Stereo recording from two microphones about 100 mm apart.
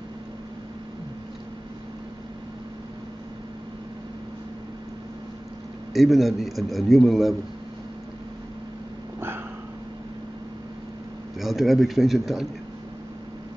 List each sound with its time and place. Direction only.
5.9 s a man's voice: centre (ahead or behind)
11.3 s a man's voice: centre (ahead or behind)